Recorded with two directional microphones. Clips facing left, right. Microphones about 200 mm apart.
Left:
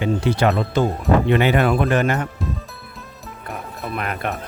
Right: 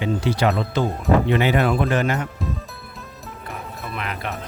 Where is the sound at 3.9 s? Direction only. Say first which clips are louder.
Left 5 dB; 50° left (ahead or behind).